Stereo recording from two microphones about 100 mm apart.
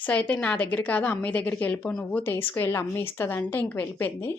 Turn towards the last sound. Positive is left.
turn(degrees=20)  # may be behind; listen again after turning